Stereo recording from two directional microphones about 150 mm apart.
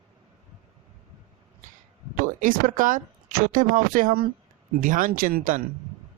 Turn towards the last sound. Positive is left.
turn(degrees=-65)  # may be behind; listen again after turning